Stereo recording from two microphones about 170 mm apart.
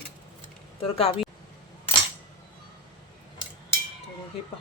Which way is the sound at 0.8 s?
35° left (ahead or behind).